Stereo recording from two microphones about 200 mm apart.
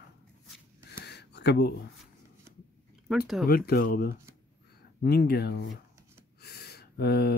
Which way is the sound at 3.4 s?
50° left (ahead or behind).